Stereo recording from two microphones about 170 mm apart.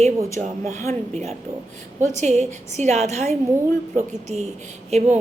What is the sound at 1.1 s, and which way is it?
A woman's voice, 40° right (ahead or behind).